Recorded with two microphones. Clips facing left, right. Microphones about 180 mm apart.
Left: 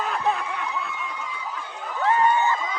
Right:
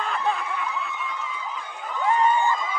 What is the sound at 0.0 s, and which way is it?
Snicker, centre (ahead or behind).